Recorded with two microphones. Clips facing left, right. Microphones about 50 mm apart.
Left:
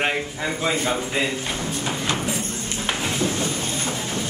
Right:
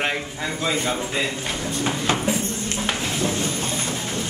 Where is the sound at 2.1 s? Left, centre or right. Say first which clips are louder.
Right 2 dB; centre.